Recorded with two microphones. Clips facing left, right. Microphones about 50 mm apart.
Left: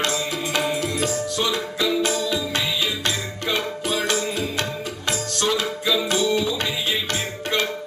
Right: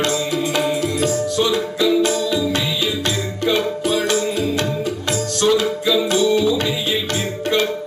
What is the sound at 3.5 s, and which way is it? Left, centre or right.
Music, left.